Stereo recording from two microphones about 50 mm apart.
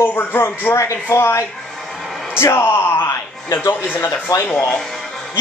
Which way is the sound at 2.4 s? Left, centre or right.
Left.